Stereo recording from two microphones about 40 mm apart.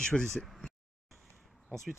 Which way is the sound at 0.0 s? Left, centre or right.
Centre.